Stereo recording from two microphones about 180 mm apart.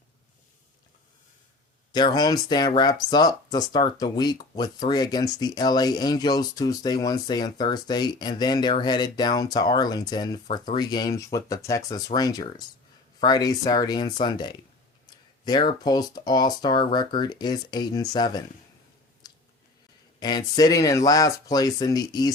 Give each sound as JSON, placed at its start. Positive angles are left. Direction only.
{"t": 1.9, "sound": "speech", "side_deg": 25}
{"t": 19.2, "sound": "a sound", "side_deg": 20}
{"t": 20.1, "sound": "speech", "side_deg": 20}